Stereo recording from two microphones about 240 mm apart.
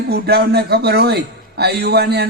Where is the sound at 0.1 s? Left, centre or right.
Right.